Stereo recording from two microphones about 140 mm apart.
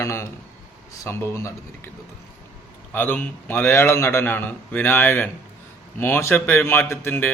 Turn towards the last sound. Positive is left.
turn(degrees=15)  # may be behind; listen again after turning